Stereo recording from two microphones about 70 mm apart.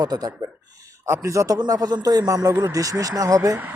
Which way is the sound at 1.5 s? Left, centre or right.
Right.